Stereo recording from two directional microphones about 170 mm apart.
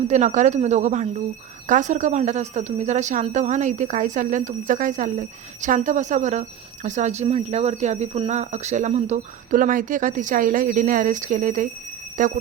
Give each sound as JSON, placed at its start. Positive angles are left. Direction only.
{"t": 0.1, "sound": "speech", "side_deg": -45}